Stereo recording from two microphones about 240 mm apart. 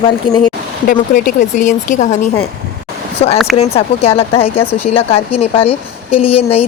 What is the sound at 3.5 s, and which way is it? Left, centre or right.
Speech, left.